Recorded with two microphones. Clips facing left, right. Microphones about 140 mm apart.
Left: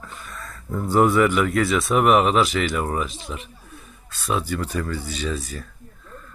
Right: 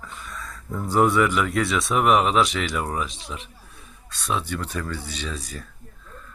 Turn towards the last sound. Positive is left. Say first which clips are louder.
# left 5 dB
turn(degrees=0)  # may be behind; listen again after turning